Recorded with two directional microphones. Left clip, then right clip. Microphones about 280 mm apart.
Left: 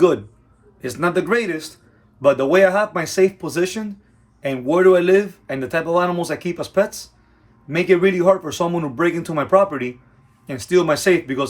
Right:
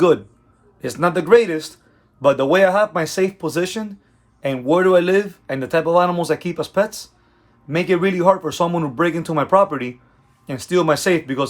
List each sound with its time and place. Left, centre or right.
0.8 s speech: centre